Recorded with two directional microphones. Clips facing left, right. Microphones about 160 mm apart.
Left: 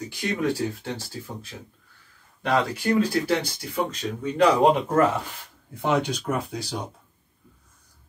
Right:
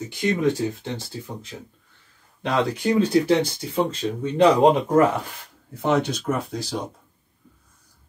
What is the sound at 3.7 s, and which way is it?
Speech, 30° right (ahead or behind).